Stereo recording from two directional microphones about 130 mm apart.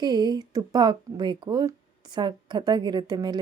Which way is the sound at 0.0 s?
35° right (ahead or behind).